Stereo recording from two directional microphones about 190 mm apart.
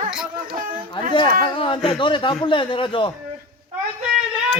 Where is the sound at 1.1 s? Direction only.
25° left (ahead or behind).